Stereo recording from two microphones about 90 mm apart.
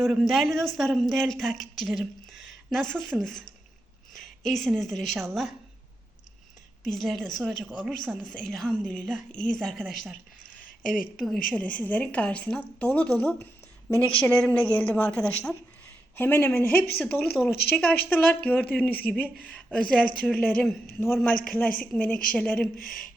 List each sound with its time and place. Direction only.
0.0 s a woman's voice: centre (ahead or behind)
6.8 s a woman's voice: centre (ahead or behind)
10.9 s a woman's voice: 5° left (ahead or behind)
11.6 s speech: 15° left (ahead or behind)
16.1 s speech: 25° left (ahead or behind); by 23.0 s 5° left (ahead or behind)